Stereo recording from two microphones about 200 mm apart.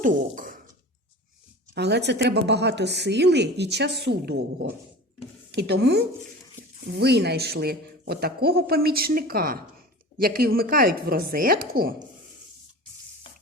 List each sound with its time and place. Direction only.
0.0 s speech: 40° right (ahead or behind)
1.7 s a woman's voice: 55° right (ahead or behind)